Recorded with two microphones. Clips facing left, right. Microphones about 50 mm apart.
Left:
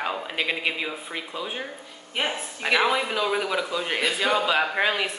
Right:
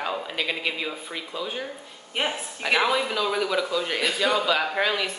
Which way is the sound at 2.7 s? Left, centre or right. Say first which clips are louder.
Even; centre.